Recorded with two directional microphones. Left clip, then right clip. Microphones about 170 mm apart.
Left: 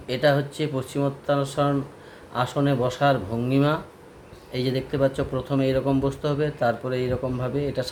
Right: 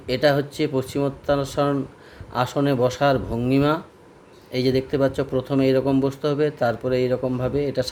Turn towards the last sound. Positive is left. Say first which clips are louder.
# right 4 dB
turn(degrees=-55)  # may be behind; listen again after turning